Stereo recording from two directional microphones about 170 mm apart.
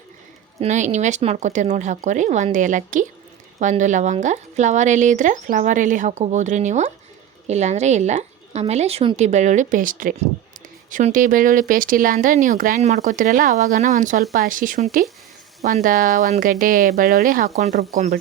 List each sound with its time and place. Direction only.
0.6 s speech: 45° right (ahead or behind)
17.6 s speech: 40° right (ahead or behind)